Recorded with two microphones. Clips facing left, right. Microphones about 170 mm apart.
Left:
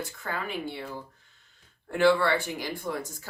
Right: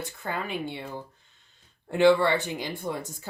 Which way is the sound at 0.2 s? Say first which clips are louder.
Right 2 dB; 25° right (ahead or behind).